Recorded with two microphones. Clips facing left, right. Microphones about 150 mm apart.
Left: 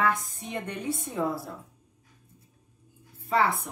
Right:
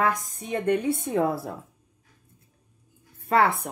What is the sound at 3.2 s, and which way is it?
Speech, 60° right (ahead or behind).